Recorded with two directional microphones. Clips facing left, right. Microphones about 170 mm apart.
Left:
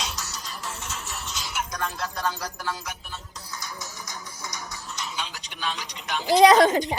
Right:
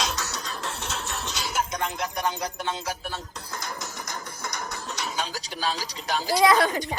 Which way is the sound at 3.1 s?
50° right (ahead or behind).